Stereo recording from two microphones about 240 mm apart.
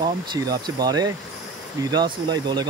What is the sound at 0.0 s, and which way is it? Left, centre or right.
Speech, centre.